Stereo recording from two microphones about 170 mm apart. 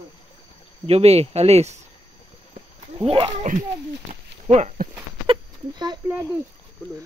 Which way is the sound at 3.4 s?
45° right (ahead or behind).